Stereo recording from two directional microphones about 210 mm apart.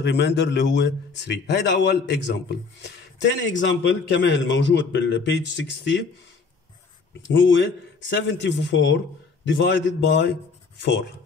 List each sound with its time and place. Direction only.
0.0 s speech: 55° left (ahead or behind)
7.2 s speech: 60° left (ahead or behind)